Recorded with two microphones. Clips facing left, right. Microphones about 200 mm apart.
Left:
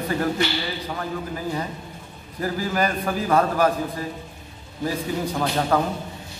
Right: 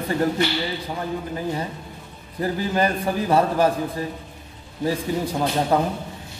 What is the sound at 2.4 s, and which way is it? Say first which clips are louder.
Speech: right 2 dB; 25° right (ahead or behind).